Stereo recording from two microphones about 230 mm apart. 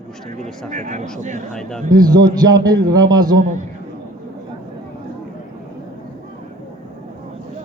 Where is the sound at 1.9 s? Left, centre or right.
Centre.